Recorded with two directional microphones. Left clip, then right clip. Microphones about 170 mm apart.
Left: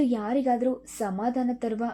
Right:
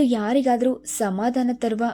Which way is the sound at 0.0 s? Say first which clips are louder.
Right 5 dB; 20° right (ahead or behind).